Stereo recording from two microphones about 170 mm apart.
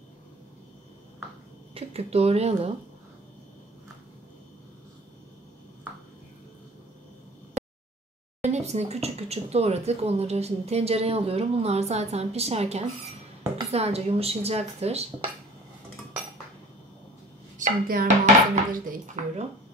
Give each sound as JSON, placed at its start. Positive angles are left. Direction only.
{"t": 1.7, "sound": "speech", "side_deg": -35}
{"t": 8.4, "sound": "speech", "side_deg": -40}
{"t": 17.6, "sound": "speech", "side_deg": -55}